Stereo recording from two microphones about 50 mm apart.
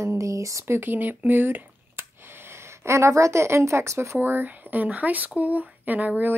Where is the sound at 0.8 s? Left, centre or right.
Right.